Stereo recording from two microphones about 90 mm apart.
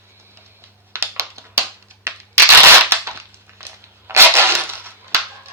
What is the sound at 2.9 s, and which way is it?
Crushing, 30° right (ahead or behind).